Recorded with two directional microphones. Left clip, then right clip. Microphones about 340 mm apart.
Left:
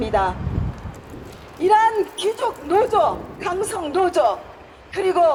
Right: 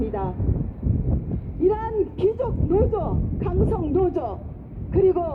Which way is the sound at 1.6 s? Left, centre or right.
Left.